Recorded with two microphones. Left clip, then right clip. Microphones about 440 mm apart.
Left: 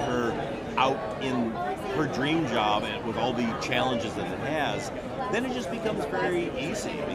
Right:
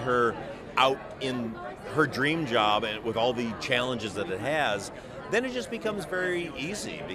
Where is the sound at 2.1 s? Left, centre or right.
Right.